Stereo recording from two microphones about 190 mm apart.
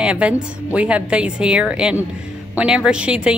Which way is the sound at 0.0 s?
5° right (ahead or behind).